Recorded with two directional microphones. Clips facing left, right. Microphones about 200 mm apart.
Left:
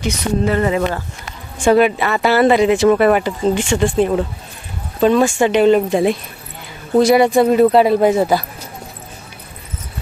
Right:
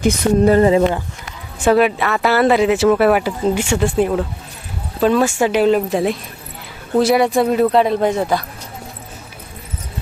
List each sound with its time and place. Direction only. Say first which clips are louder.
0.0 s speech: right 5 dB; 35° right (ahead or behind)
1.6 s speech: left 1 dB; centre (ahead or behind)